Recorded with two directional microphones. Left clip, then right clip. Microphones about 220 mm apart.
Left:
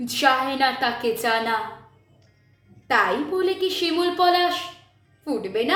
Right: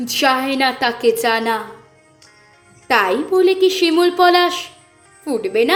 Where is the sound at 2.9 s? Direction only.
30° right (ahead or behind).